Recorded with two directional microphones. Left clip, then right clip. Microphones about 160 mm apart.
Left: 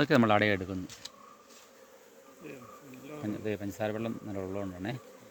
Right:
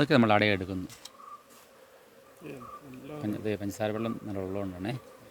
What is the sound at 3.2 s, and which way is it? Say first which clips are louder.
Speech: right 2 dB; 10° right (ahead or behind).